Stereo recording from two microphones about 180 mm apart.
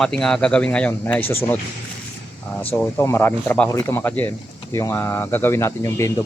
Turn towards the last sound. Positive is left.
turn(degrees=15)  # may be behind; listen again after turning